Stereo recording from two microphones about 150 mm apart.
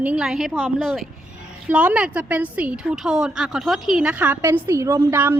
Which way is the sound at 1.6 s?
10° right (ahead or behind).